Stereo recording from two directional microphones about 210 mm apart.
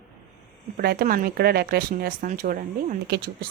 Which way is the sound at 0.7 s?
45° right (ahead or behind).